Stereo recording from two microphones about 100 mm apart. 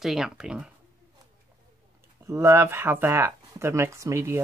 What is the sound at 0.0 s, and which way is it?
Speech, 5° right (ahead or behind).